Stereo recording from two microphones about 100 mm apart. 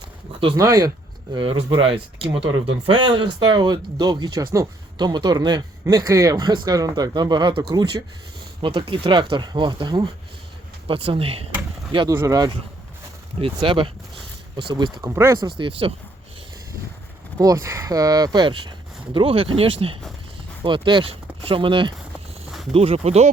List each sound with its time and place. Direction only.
0.5 s speech: 35° right (ahead or behind)
1.4 s speech: 55° right (ahead or behind); by 6.3 s 35° right (ahead or behind)
6.3 s speech: 50° right (ahead or behind)
8.6 s speech: 55° right (ahead or behind)
10.8 s speech: 65° right (ahead or behind)
12.0 s speech: 30° right (ahead or behind)
13.4 s speech: 60° right (ahead or behind)
15.0 s speech: 25° right (ahead or behind)
15.4 s speech: 55° right (ahead or behind)
17.3 s speech: 35° right (ahead or behind)
19.1 s speech: 65° right (ahead or behind)
20.7 s speech: 55° right (ahead or behind)
21.1 s speech: 65° right (ahead or behind)
22.7 s speech: 85° right